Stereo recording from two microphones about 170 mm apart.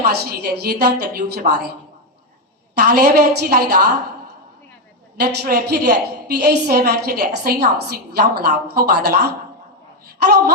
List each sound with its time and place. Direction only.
0.0 s a woman's voice: 65° right (ahead or behind)
2.9 s a woman's voice: 65° right (ahead or behind)
5.2 s a woman's voice: 55° right (ahead or behind)
5.5 s a woman's voice: 75° right (ahead or behind)